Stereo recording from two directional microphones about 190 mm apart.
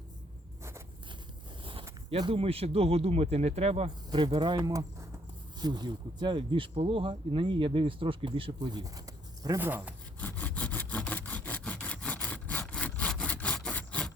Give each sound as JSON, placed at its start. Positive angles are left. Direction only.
{"t": 2.0, "sound": "speech", "side_deg": -30}
{"t": 10.2, "sound": "sawing", "side_deg": 10}